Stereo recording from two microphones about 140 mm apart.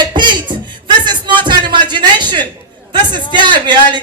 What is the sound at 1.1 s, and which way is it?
Music, 35° right (ahead or behind).